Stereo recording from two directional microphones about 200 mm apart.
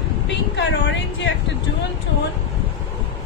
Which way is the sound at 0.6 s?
60° left (ahead or behind).